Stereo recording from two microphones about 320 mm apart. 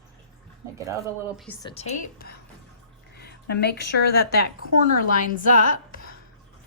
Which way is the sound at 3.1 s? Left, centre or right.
Left.